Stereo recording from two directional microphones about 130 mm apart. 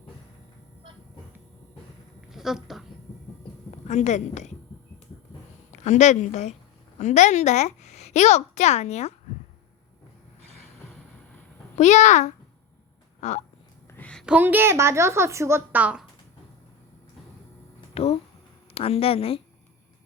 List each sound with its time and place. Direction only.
2.3 s speech: 5° right (ahead or behind)
3.7 s a woman's voice: 65° left (ahead or behind)
5.7 s a woman's voice: 65° left (ahead or behind)
11.8 s speech: 65° left (ahead or behind)
13.9 s a sound: 10° left (ahead or behind)
14.3 s a woman's voice: 15° right (ahead or behind)
17.9 s a sound: 50° left (ahead or behind)
18.7 s speech: 50° left (ahead or behind)